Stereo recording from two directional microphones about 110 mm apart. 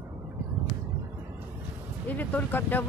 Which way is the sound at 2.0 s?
15° left (ahead or behind).